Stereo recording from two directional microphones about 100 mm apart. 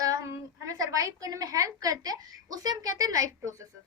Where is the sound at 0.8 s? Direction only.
35° right (ahead or behind).